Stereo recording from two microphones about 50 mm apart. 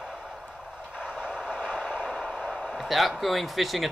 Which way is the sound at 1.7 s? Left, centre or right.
Centre.